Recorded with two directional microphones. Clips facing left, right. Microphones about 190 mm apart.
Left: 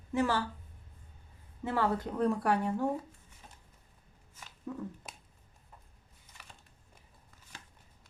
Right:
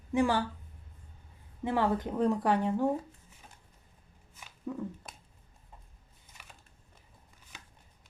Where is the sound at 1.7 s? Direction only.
20° right (ahead or behind).